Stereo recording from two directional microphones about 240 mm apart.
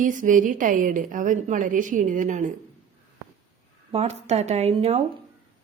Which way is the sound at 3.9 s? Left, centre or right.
Right.